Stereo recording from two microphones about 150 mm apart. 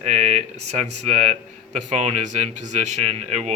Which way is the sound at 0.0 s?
45° right (ahead or behind).